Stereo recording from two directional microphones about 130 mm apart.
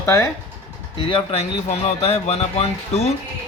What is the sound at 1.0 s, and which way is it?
Speech, 45° left (ahead or behind).